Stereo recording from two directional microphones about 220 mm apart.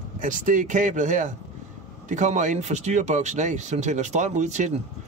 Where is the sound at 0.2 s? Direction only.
35° right (ahead or behind).